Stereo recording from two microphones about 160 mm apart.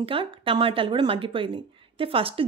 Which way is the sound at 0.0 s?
35° right (ahead or behind).